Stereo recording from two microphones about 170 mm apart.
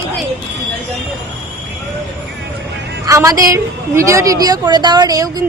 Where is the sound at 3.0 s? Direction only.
20° right (ahead or behind).